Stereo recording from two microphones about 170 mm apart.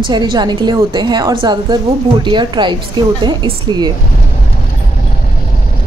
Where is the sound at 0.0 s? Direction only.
25° right (ahead or behind).